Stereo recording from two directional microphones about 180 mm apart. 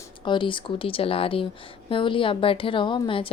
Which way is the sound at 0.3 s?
25° left (ahead or behind).